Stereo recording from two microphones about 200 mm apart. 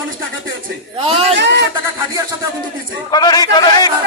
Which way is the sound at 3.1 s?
20° left (ahead or behind).